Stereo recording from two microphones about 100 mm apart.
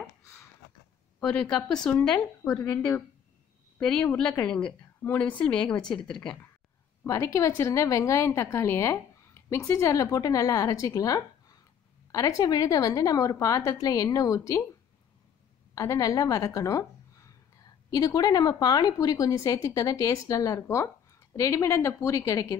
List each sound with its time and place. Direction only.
1.2 s a woman's voice: 10° left (ahead or behind)
3.8 s a woman's voice: 5° left (ahead or behind)
7.1 s a woman's voice: 30° left (ahead or behind)
15.7 s a woman's voice: 35° left (ahead or behind)